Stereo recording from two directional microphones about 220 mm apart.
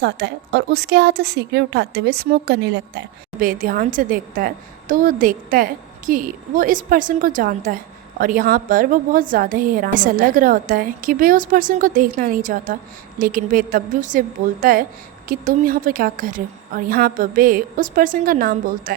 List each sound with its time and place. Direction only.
0.0 s a woman's voice: 50° right (ahead or behind)
3.4 s a woman's voice: 40° right (ahead or behind)